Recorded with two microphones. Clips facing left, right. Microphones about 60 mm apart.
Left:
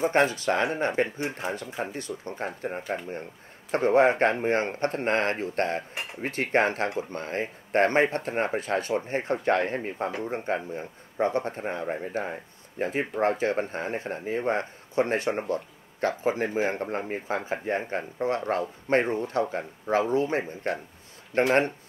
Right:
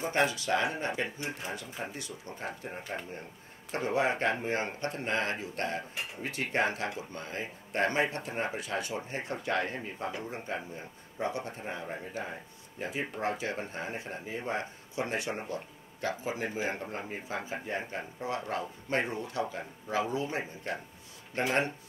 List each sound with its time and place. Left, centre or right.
0.0 s speech: left